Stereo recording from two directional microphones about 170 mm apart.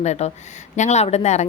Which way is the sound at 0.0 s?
40° left (ahead or behind).